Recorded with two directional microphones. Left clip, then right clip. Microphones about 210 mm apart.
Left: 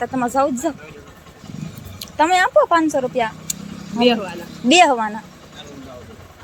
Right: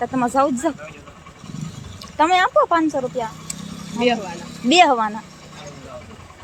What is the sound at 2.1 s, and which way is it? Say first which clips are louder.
Speech: left 1 dB; centre (ahead or behind).